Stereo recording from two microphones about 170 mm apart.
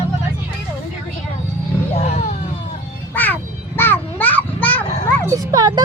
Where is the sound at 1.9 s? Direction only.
40° left (ahead or behind).